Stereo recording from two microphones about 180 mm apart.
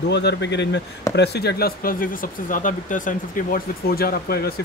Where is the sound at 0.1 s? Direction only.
70° left (ahead or behind).